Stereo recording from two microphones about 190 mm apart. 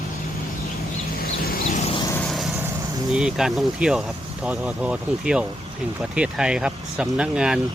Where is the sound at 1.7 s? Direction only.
35° left (ahead or behind).